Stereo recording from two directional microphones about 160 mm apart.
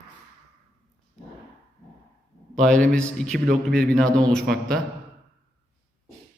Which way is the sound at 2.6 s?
5° left (ahead or behind).